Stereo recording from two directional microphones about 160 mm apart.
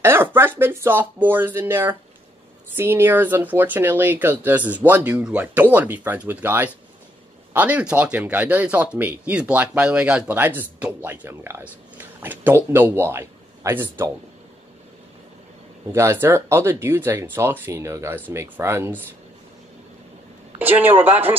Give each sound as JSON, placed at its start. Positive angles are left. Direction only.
{"t": 0.0, "sound": "speech", "side_deg": -15}
{"t": 15.9, "sound": "speech", "side_deg": -15}
{"t": 20.5, "sound": "speech", "side_deg": -10}